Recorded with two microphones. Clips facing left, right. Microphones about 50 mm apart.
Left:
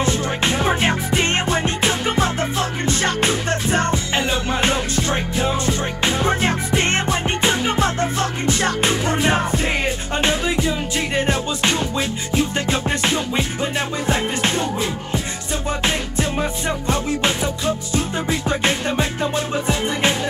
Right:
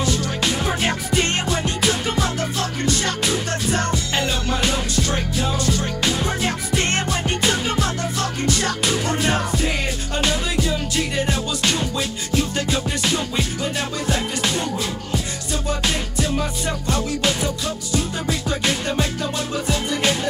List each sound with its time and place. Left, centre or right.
0.0 s music: left